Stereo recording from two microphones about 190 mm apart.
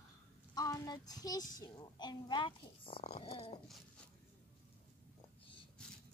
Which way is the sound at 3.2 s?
30° left (ahead or behind).